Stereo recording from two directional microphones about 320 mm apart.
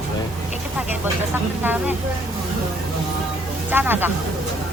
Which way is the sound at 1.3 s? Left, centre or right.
Centre.